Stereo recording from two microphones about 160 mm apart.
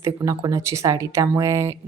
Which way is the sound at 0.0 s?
20° right (ahead or behind).